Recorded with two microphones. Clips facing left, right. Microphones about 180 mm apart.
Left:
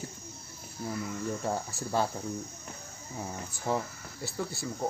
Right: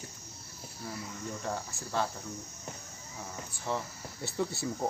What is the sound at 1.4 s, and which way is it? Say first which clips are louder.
Speech: left 4 dB; 35° left (ahead or behind).